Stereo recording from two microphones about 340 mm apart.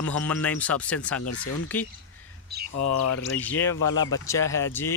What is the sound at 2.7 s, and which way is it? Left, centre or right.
Speech, left.